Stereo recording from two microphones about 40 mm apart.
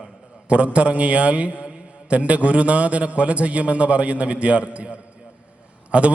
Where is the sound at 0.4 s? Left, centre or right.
Right.